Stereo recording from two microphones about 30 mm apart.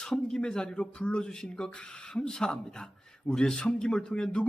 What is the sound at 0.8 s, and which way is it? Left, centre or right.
Speech, left.